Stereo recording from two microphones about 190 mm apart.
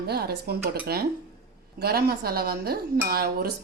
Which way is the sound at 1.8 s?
55° right (ahead or behind).